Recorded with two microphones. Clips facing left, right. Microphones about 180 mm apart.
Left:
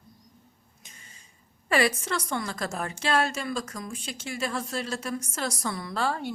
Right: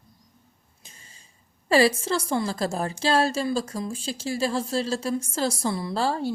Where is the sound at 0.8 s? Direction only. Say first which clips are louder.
Right 1 dB; 30° right (ahead or behind).